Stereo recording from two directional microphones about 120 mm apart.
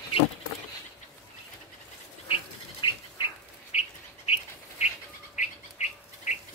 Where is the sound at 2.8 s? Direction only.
40° left (ahead or behind).